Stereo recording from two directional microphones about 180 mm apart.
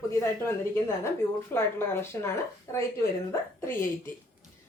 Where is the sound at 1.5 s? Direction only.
15° left (ahead or behind).